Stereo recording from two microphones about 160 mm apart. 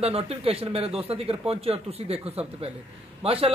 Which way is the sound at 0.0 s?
40° right (ahead or behind).